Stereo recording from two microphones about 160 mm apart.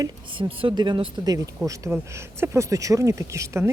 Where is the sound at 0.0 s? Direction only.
35° right (ahead or behind).